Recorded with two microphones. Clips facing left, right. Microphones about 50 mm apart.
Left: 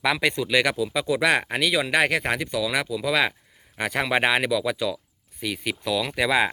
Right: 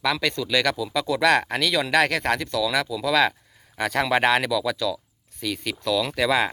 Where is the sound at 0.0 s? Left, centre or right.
Left.